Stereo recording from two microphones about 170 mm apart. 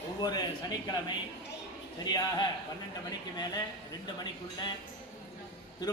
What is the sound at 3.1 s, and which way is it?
Speech, 25° left (ahead or behind).